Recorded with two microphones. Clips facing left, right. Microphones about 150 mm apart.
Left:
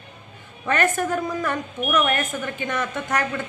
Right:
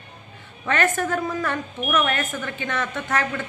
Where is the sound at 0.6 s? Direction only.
15° left (ahead or behind).